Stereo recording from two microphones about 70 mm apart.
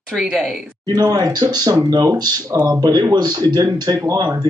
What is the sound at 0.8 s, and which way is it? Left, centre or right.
Speech, right.